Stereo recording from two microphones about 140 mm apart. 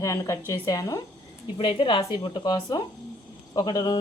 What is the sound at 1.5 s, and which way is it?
Speech, 40° left (ahead or behind).